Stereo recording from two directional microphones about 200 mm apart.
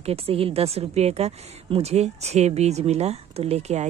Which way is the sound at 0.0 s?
30° right (ahead or behind).